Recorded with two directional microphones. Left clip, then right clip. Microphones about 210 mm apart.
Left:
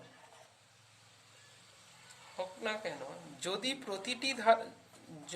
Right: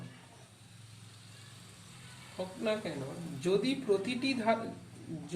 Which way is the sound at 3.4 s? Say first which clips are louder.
Right 7 dB; 50° left (ahead or behind).